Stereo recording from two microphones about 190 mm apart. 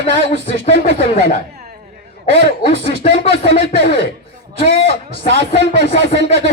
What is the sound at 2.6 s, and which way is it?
A man's voice, 30° left (ahead or behind).